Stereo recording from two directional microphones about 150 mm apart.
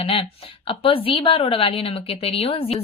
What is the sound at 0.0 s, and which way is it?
A woman's voice, 40° left (ahead or behind).